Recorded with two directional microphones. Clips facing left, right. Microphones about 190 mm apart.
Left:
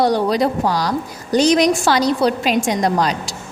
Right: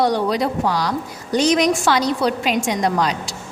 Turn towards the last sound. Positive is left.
turn(degrees=35)  # may be behind; listen again after turning